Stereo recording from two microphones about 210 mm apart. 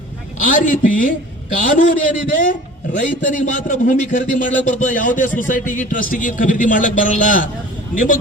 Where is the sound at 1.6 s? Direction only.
40° left (ahead or behind).